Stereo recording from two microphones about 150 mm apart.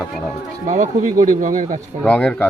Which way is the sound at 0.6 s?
55° right (ahead or behind).